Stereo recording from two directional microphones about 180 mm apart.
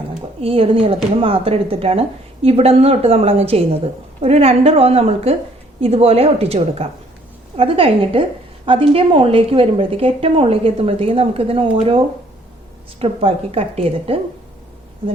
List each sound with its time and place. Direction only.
0.4 s a woman's voice: 30° right (ahead or behind)